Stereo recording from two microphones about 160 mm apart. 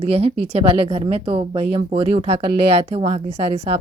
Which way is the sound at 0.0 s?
40° right (ahead or behind).